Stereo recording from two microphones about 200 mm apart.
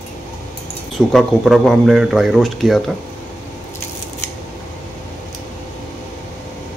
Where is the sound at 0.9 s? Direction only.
Centre (ahead or behind).